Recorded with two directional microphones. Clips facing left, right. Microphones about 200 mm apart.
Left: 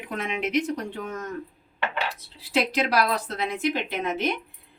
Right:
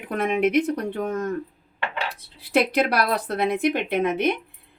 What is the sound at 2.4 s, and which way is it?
Speech, 55° right (ahead or behind).